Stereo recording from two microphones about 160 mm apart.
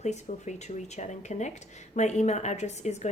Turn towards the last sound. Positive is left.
turn(degrees=45)  # may be behind; listen again after turning